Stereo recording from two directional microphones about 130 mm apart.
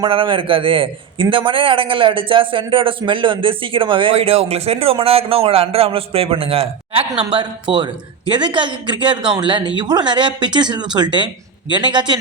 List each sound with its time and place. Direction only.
0.0 s a man's voice: 40° right (ahead or behind)